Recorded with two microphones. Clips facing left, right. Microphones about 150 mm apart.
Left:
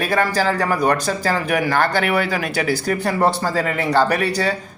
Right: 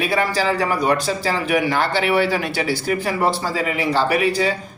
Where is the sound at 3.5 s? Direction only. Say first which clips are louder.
Left 2 dB; 45° left (ahead or behind).